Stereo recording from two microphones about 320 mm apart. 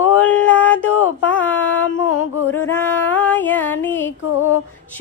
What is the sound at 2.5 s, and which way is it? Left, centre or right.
Music, centre.